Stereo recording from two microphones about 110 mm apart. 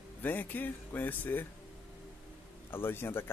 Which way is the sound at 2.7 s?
20° left (ahead or behind).